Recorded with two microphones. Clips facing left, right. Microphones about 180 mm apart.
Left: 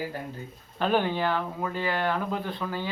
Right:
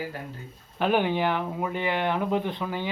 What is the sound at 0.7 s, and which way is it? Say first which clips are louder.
Speech: right 2 dB; 15° right (ahead or behind).